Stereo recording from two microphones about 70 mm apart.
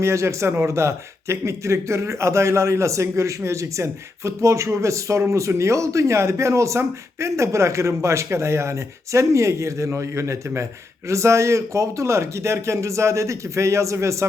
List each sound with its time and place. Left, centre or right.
0.0 s speech: right